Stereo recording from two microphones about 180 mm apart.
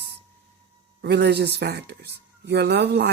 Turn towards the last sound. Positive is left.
turn(degrees=-65)  # may be behind; listen again after turning